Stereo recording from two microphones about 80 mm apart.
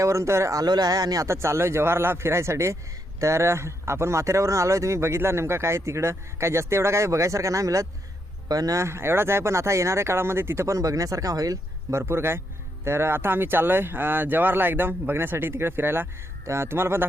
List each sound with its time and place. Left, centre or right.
0.0 s a man's voice: right
0.6 s speech: right
1.3 s a man's voice: right
8.8 s a man's voice: right
11.9 s a man's voice: right